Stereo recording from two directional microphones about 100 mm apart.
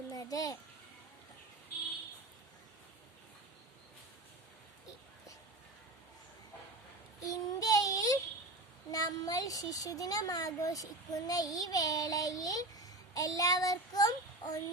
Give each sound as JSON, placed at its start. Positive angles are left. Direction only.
{"t": 0.1, "sound": "a sound", "side_deg": 35}
{"t": 7.2, "sound": "child singing", "side_deg": 35}
{"t": 8.9, "sound": "a child's voice", "side_deg": 40}